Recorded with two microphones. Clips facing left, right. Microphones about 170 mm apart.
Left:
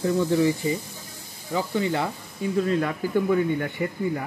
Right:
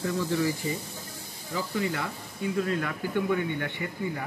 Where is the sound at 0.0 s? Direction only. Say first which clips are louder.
Left 6 dB; 25° left (ahead or behind).